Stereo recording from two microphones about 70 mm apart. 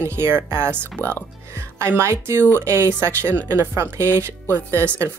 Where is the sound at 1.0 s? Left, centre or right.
Left.